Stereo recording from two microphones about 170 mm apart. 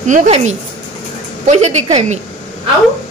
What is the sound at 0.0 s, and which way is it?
A woman's voice, 45° right (ahead or behind).